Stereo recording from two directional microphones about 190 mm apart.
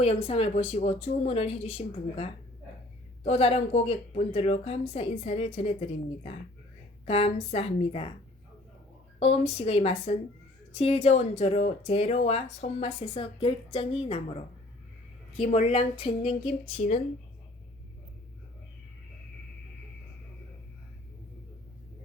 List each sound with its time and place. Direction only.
0.3 s speech: 35° left (ahead or behind)
7.0 s speech: 30° left (ahead or behind)
9.1 s speech: 35° left (ahead or behind)